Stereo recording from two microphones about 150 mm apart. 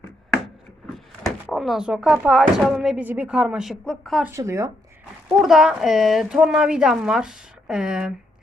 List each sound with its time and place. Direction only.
0.9 s speech: centre (ahead or behind)
4.2 s speech: 15° right (ahead or behind)
5.4 s a woman's voice: centre (ahead or behind)